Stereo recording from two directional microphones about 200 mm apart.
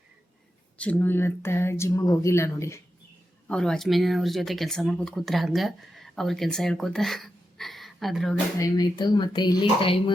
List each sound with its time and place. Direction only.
0.8 s speech: 10° left (ahead or behind)
8.5 s speech: 20° left (ahead or behind)